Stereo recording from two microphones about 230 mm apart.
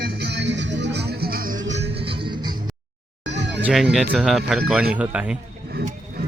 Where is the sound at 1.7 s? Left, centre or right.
Right.